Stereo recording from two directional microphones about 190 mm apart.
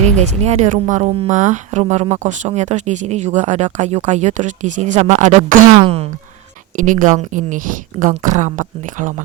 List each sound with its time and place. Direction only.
0.0 s a woman's voice: 35° right (ahead or behind)
5.7 s speech: 30° right (ahead or behind)
6.7 s a woman's voice: 40° right (ahead or behind)